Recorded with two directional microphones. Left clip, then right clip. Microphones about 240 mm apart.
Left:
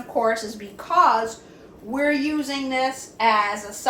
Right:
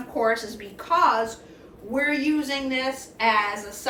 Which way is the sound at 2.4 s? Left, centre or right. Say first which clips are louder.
Left 3 dB; centre.